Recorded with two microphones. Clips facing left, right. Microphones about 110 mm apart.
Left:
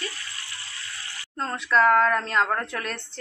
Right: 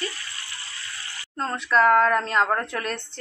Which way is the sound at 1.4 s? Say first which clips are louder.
Right 1 dB; centre (ahead or behind).